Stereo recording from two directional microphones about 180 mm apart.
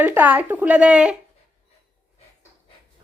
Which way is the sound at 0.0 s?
10° right (ahead or behind).